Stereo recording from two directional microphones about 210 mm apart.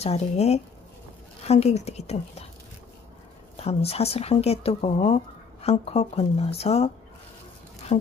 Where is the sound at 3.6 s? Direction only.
30° left (ahead or behind).